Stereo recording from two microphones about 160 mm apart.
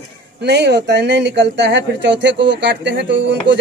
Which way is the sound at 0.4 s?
90° right.